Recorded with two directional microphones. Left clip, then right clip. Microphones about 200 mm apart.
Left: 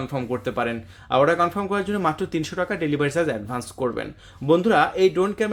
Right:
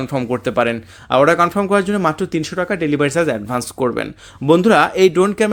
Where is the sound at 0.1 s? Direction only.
40° right (ahead or behind).